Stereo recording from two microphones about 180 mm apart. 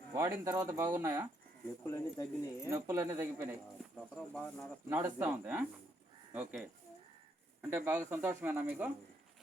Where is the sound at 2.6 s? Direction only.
15° right (ahead or behind).